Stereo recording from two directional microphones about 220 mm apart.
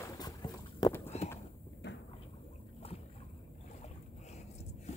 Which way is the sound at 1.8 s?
50° left (ahead or behind).